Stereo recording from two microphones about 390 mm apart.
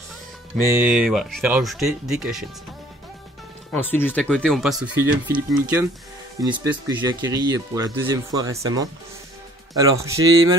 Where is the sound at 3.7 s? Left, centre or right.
Centre.